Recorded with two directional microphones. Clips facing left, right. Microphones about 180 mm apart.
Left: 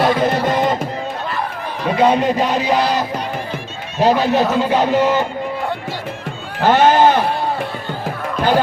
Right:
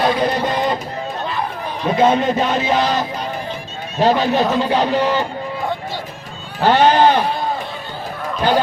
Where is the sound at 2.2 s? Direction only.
Centre (ahead or behind).